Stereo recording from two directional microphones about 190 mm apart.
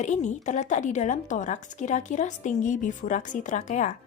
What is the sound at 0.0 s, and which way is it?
A woman's voice, 40° left (ahead or behind).